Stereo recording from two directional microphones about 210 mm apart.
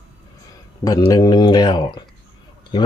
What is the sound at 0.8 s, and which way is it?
Speech, 20° left (ahead or behind).